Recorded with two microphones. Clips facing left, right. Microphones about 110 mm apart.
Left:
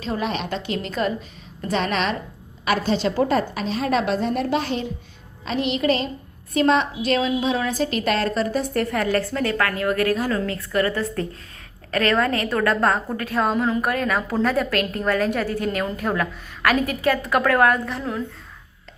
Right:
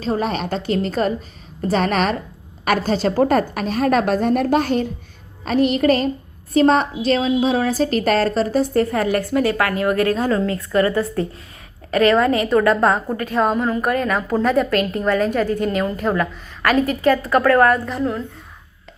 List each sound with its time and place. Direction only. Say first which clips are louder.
0.0 s a woman's voice: right 4 dB; 40° right (ahead or behind)
9.1 s a woman's voice: right 4 dB; 15° right (ahead or behind)
11.9 s a woman's voice: right 5 dB; 10° right (ahead or behind)
16.8 s a woman's voice: right 4 dB; 10° left (ahead or behind)